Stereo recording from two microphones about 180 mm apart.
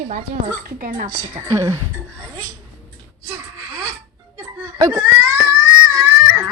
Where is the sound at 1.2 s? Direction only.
15° right (ahead or behind).